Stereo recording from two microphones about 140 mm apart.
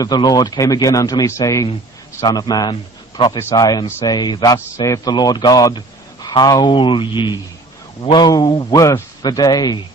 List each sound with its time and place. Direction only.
0.0 s a man's voice: 30° left (ahead or behind)